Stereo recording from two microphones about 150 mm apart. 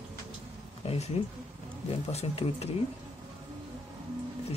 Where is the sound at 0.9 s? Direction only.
45° left (ahead or behind).